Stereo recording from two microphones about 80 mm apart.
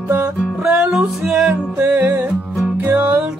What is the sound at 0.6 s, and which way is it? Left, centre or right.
Music, centre.